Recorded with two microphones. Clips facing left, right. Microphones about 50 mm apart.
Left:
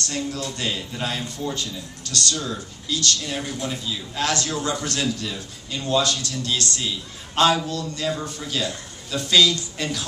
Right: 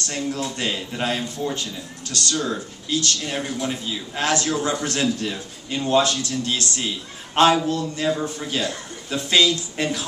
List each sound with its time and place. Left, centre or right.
0.1 s speech: right